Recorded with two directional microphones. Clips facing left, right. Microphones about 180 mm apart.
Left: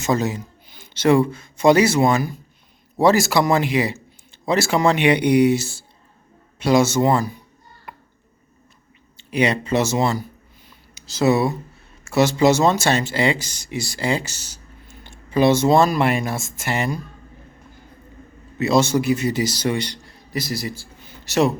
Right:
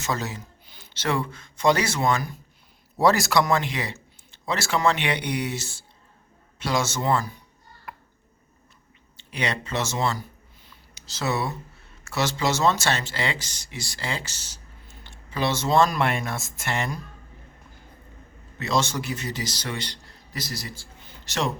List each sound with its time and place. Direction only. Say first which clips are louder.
0.0 s a man's voice: left 8 dB; 15° left (ahead or behind)
7.9 s a sound: left 1 dB; centre (ahead or behind)
9.1 s a man's voice: left 9 dB; 10° left (ahead or behind)
18.6 s a man's voice: left 8 dB; 10° left (ahead or behind)